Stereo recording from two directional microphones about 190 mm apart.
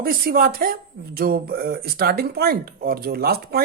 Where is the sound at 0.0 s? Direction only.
50° right (ahead or behind).